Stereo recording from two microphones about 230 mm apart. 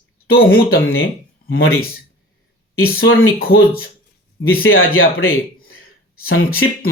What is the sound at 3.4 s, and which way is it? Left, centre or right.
Speech, left.